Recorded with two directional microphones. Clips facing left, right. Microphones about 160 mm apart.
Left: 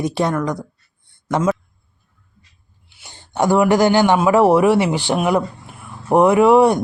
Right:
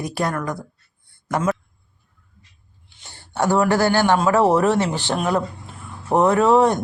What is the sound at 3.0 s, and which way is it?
Speech, 15° left (ahead or behind).